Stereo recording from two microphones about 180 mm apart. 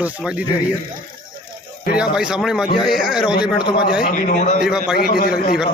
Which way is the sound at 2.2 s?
5° right (ahead or behind).